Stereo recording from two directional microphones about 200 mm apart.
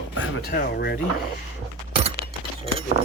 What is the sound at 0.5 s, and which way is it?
Speech, 50° left (ahead or behind).